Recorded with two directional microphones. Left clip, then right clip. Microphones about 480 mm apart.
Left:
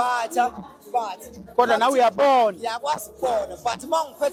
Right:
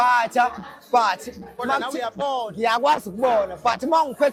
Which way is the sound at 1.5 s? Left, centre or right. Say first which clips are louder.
Left 6 dB; left.